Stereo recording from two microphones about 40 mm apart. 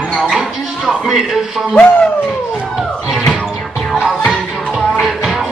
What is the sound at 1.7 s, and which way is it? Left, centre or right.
Speech, left.